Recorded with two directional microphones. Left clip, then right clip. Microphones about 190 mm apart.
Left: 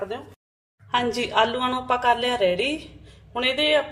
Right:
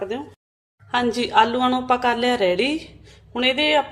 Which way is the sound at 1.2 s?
25° right (ahead or behind).